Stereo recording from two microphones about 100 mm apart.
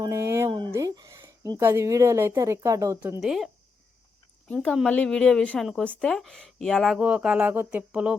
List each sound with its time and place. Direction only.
0.0 s a sound: 30° right (ahead or behind)
0.7 s a woman's voice: 35° right (ahead or behind)
3.2 s speech: 5° right (ahead or behind)
4.5 s a woman's voice: centre (ahead or behind)
7.0 s speech: 10° right (ahead or behind)